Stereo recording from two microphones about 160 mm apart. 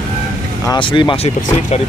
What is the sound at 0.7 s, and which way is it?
Speech, 30° left (ahead or behind).